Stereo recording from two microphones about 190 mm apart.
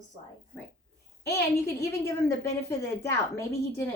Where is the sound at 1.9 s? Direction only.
15° left (ahead or behind).